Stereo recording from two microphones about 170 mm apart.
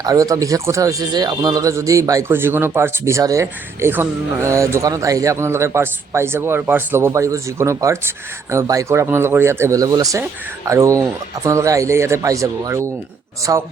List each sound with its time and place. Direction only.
0.0 s speech: 20° right (ahead or behind)